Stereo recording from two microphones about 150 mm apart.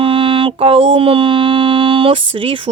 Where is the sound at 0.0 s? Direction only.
35° right (ahead or behind).